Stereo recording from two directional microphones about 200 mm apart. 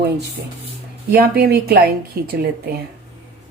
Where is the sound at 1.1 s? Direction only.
50° right (ahead or behind).